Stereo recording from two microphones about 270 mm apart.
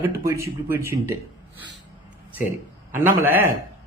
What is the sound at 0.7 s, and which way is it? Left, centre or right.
Speech, centre.